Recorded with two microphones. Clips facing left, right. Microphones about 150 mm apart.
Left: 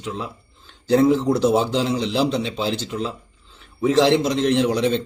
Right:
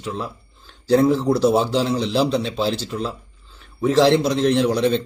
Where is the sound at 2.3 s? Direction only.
60° right (ahead or behind).